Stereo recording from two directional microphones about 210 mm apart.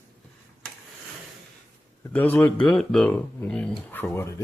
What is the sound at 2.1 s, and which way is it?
Speech, 10° left (ahead or behind).